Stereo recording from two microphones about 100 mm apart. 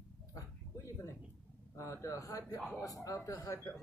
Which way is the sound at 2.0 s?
35° left (ahead or behind).